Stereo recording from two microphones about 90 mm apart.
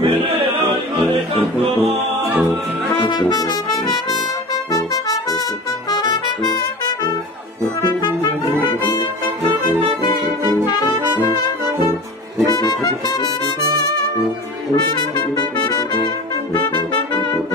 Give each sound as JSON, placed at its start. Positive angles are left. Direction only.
{"t": 0.0, "sound": "music", "side_deg": -90}
{"t": 3.0, "sound": "brass instrument", "side_deg": 60}
{"t": 4.7, "sound": "trumpet", "side_deg": 45}
{"t": 5.9, "sound": "music", "side_deg": 50}
{"t": 12.5, "sound": "brass instrument", "side_deg": 40}
{"t": 14.9, "sound": "music", "side_deg": 45}